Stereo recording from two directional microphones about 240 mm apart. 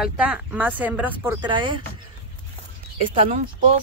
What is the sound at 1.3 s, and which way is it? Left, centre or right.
Speech, centre.